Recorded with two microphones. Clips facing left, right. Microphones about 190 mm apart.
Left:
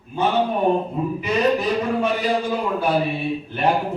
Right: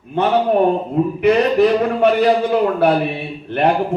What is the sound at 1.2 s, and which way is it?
A man's voice, 60° right (ahead or behind).